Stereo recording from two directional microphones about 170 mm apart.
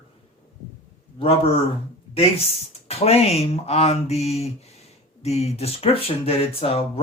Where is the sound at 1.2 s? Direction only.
35° left (ahead or behind).